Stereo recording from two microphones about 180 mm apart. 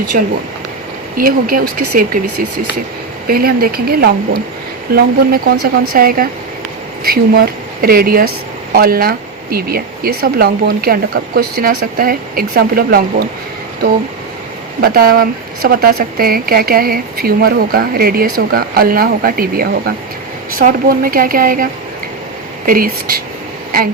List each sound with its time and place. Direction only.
0.1 s a woman's voice: 55° right (ahead or behind)
3.2 s speech: 55° right (ahead or behind)
14.8 s a woman's voice: 55° right (ahead or behind)